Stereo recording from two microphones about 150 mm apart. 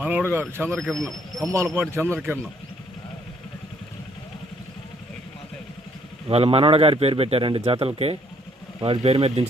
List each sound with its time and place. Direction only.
0.0 s speech: 10° right (ahead or behind)
0.8 s speech: centre (ahead or behind)
1.5 s speech: 15° right (ahead or behind)
6.2 s a man's voice: 40° right (ahead or behind)